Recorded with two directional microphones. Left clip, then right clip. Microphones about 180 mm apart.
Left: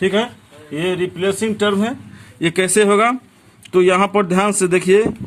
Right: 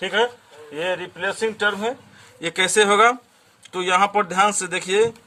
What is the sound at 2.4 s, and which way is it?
A man's voice, 25° left (ahead or behind).